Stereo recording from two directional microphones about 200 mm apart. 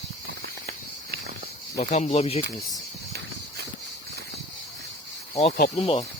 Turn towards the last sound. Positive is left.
turn(degrees=30)  # may be behind; listen again after turning